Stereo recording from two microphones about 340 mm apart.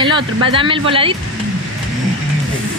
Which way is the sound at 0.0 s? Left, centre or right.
Centre.